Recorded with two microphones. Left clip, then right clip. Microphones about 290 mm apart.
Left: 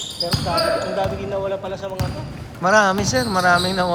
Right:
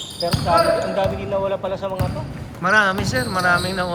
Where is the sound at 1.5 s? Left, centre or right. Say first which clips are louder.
Right 2 dB; right.